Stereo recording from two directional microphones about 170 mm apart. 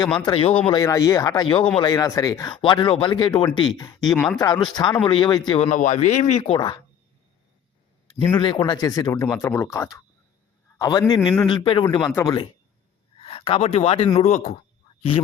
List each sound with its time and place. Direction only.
0.2 s speech: 30° left (ahead or behind)
0.8 s speech: 20° left (ahead or behind)
4.0 s speech: 5° left (ahead or behind)
4.4 s speech: 20° left (ahead or behind)
5.5 s speech: 45° left (ahead or behind)
8.3 s a man's voice: 25° left (ahead or behind)